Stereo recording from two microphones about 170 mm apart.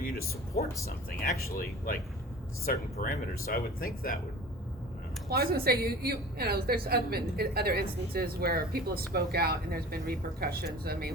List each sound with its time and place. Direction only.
0.0 s music: 60° left (ahead or behind)
0.6 s speech: 55° left (ahead or behind)
5.3 s a woman's voice: 60° right (ahead or behind)